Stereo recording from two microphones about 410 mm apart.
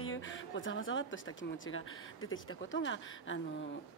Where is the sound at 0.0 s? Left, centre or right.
Left.